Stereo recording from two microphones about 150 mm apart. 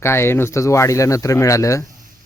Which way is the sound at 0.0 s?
15° left (ahead or behind).